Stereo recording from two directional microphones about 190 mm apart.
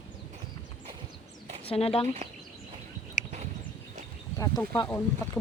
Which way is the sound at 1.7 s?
30° left (ahead or behind).